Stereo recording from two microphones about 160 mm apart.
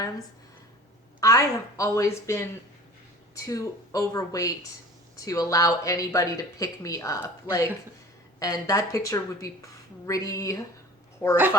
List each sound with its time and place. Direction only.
1.2 s a woman's voice: 20° left (ahead or behind)